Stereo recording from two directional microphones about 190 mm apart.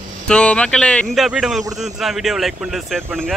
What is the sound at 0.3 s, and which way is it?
Speech, 5° left (ahead or behind).